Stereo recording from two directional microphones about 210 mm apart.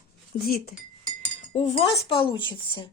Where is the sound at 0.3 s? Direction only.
45° left (ahead or behind).